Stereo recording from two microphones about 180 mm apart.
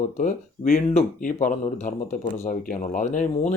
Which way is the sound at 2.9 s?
45° left (ahead or behind).